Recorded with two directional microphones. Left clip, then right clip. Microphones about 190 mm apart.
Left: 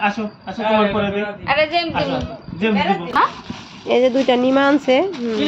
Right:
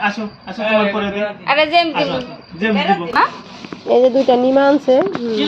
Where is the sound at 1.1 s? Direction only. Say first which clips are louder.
Right 3 dB; 50° right (ahead or behind).